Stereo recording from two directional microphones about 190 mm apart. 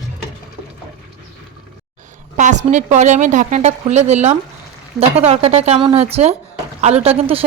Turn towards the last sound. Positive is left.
turn(degrees=-30)  # may be behind; listen again after turning